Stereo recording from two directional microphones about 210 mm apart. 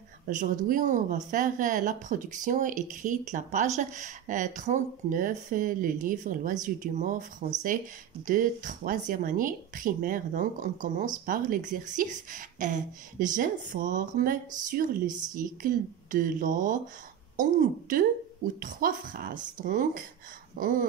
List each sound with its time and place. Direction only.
0.3 s speech: 35° right (ahead or behind)
15.0 s a woman's voice: 20° right (ahead or behind)
15.3 s a woman's voice: 40° right (ahead or behind)